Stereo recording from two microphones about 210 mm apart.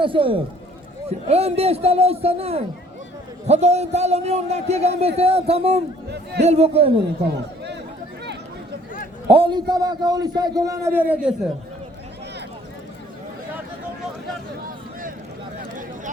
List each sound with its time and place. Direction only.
0.0 s a man's voice: 25° right (ahead or behind)
6.1 s speech: 50° right (ahead or behind)
6.4 s a man's voice: 30° right (ahead or behind)
7.3 s chatter: 55° right (ahead or behind)
9.3 s a man's voice: 25° right (ahead or behind); by 11.3 s 5° right (ahead or behind)